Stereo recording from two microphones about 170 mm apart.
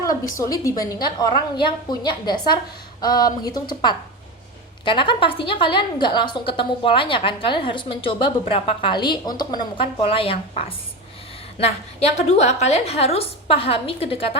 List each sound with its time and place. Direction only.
0.0 s a woman's voice: 20° left (ahead or behind); by 14.3 s 35° left (ahead or behind)